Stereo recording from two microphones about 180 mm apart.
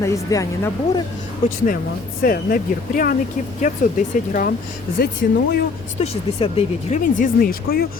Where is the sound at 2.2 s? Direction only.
55° left (ahead or behind).